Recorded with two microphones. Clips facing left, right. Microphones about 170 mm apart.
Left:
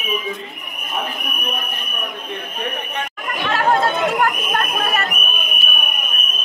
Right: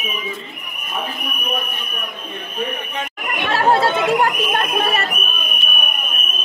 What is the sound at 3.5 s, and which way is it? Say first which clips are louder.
Speech: right 2 dB; 30° right (ahead or behind).